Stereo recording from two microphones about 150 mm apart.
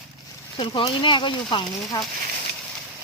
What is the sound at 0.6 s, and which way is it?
Speech, 35° left (ahead or behind).